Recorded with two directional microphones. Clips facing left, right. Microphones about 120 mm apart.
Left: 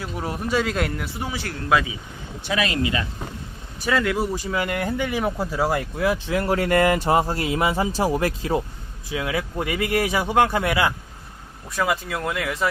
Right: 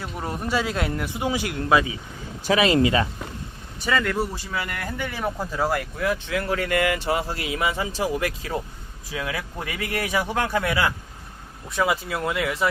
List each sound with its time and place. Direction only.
0.0 s speech: centre (ahead or behind)
1.2 s speech: 15° right (ahead or behind)
2.6 s speech: 30° right (ahead or behind)
3.8 s speech: centre (ahead or behind)
4.0 s speech: 15° left (ahead or behind)
6.1 s speech: 35° left (ahead or behind)
9.1 s speech: 20° left (ahead or behind)
11.7 s speech: 5° right (ahead or behind)